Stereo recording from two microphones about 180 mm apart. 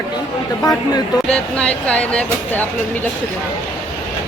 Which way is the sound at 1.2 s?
5° left (ahead or behind).